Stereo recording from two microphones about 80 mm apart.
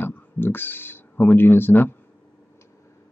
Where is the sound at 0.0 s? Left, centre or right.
Left.